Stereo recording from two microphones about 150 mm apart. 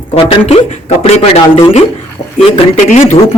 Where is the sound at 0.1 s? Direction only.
35° left (ahead or behind).